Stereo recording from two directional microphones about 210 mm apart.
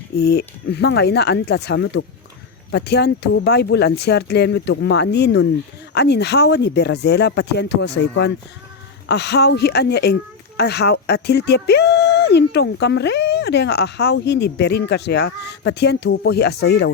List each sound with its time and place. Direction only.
0.2 s speech: 50° left (ahead or behind)